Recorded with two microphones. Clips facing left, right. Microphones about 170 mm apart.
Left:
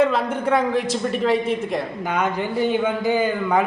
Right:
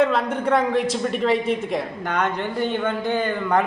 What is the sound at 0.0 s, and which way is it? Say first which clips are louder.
A man's voice: left 1 dB; centre (ahead or behind).